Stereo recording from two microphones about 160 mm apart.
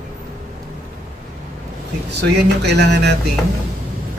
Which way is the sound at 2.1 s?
90° right.